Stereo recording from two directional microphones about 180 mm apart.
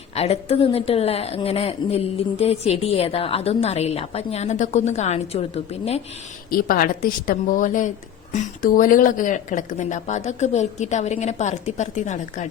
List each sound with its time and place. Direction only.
0.2 s a woman's voice: 35° left (ahead or behind)
6.5 s a woman's voice: 50° left (ahead or behind)